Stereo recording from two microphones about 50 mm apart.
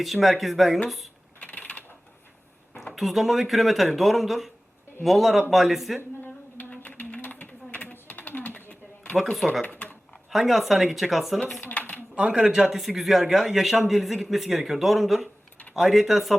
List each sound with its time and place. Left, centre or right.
0.0 s a man's voice: centre
1.4 s a sound: left
2.7 s a man's voice: centre
6.2 s typing: left
9.1 s a man's voice: centre
9.7 s a sound: left
10.2 s a man's voice: centre
11.7 s a sound: left
12.1 s speech: right
12.8 s a man's voice: centre